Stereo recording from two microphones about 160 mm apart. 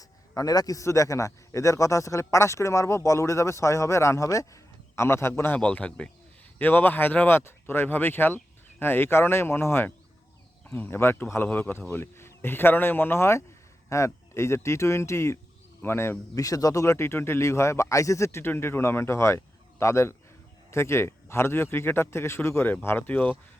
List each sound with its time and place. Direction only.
0.0 s a man's voice: 20° left (ahead or behind)